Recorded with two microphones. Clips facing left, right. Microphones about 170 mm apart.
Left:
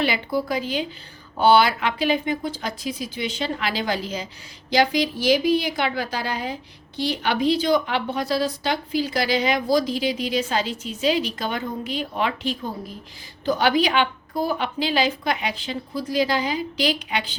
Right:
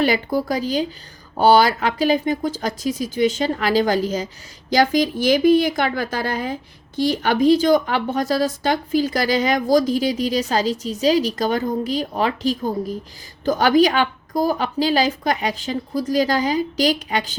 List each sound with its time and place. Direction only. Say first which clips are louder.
0.0 s a woman's voice: right 4 dB; 45° right (ahead or behind)